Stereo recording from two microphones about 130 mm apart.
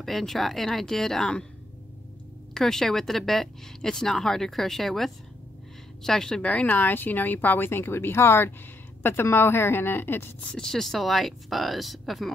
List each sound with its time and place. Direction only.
0.0 s speech: centre (ahead or behind)
2.5 s speech: 5° left (ahead or behind)
10.5 s speech: 5° left (ahead or behind)